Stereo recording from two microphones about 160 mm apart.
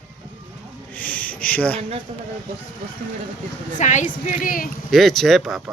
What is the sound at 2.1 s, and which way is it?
Speech, 45° right (ahead or behind).